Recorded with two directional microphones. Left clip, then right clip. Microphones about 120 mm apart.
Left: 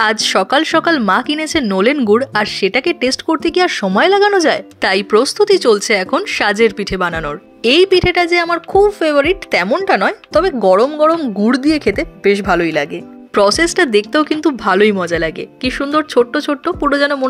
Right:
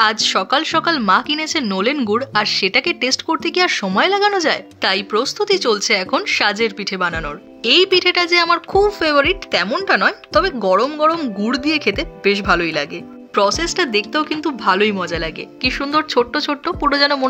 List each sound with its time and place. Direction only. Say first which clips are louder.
0.0 s speech: left 2 dB; 45° left (ahead or behind)
7.9 s speech: left 2 dB; 35° left (ahead or behind)
13.4 s speech: left 5 dB; 50° left (ahead or behind); by 17.3 s 25° left (ahead or behind)